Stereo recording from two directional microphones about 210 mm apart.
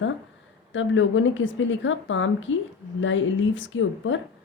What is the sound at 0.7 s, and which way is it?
Speech, 65° left (ahead or behind).